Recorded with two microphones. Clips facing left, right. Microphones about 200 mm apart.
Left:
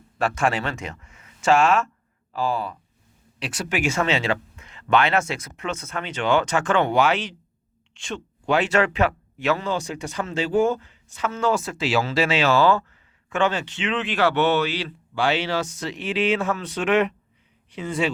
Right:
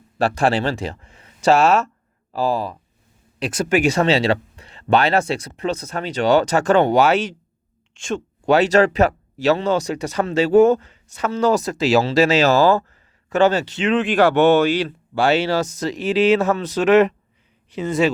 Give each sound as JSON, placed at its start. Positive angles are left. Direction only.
{"t": 0.2, "sound": "a man's voice", "side_deg": -35}